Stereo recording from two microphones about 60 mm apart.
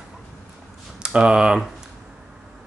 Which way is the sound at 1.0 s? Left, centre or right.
Centre.